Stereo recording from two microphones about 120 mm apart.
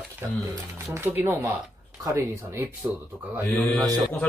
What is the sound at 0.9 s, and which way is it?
Speech, 15° right (ahead or behind).